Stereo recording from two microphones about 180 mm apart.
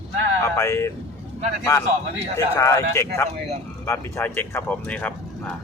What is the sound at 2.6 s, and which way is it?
A man's voice, 20° left (ahead or behind).